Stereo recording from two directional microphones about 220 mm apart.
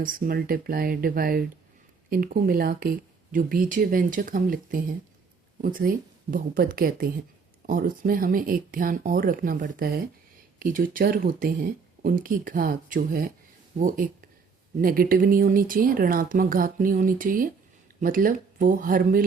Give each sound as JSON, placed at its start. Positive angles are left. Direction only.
{"t": 0.0, "sound": "speech", "side_deg": -40}